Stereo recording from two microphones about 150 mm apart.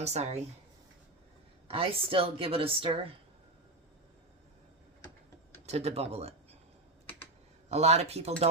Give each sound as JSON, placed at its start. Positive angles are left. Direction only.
{"t": 0.0, "sound": "speech", "side_deg": -45}
{"t": 1.6, "sound": "speech", "side_deg": -40}
{"t": 5.6, "sound": "speech", "side_deg": -45}
{"t": 7.7, "sound": "speech", "side_deg": -45}